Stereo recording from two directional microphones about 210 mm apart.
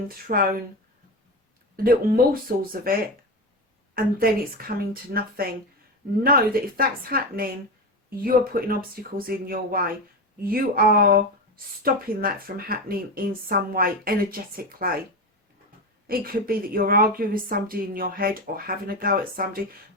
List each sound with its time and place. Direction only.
0.3 s speech: 40° right (ahead or behind)
1.7 s speech: 45° right (ahead or behind)
16.0 s speech: 45° right (ahead or behind)